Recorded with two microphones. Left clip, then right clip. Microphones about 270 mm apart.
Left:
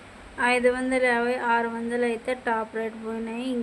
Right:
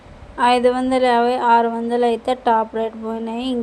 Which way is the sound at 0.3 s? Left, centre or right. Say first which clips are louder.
Right 7 dB; centre.